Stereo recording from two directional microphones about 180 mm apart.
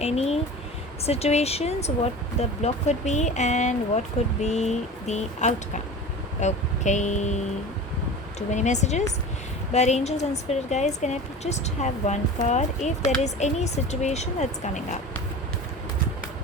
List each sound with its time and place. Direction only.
0.0 s speech: 35° left (ahead or behind)
8.4 s speech: 40° left (ahead or behind)